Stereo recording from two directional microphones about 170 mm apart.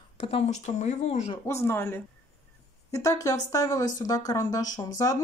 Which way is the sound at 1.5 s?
15° left (ahead or behind).